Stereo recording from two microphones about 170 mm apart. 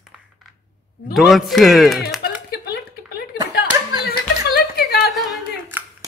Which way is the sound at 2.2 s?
70° left (ahead or behind).